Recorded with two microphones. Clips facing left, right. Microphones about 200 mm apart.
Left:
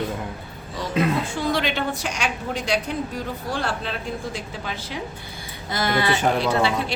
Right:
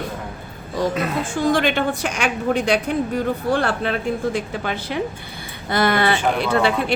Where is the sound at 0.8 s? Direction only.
45° right (ahead or behind).